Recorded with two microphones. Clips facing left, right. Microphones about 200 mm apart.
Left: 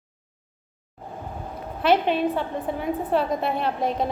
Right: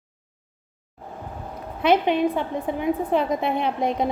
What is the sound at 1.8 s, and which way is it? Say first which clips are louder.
A woman's voice: right 1 dB; 15° right (ahead or behind).